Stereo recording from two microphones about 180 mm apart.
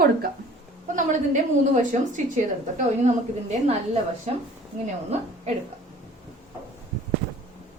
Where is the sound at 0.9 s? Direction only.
45° right (ahead or behind).